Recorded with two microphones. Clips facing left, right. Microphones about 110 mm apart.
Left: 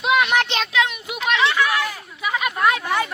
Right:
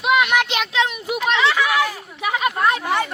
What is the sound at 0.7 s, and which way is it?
Speech, 35° right (ahead or behind).